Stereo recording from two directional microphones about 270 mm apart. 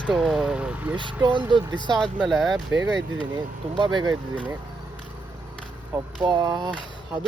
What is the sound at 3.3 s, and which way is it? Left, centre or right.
Speech, centre.